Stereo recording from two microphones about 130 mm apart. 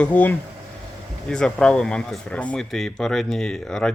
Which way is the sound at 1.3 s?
5° left (ahead or behind).